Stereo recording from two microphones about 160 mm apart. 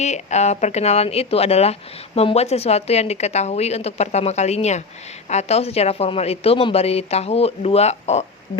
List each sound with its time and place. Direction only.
0.0 s a woman's voice: 45° left (ahead or behind)